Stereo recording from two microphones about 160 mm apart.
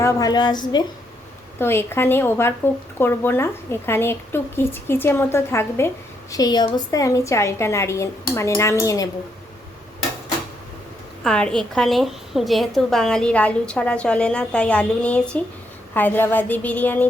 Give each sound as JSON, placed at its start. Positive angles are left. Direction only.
{"t": 0.0, "sound": "a woman's voice", "side_deg": 25}
{"t": 1.5, "sound": "a woman's voice", "side_deg": 15}
{"t": 11.2, "sound": "a woman's voice", "side_deg": 5}